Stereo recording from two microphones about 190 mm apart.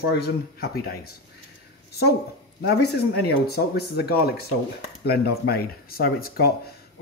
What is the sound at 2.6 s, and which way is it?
Speech, 60° left (ahead or behind).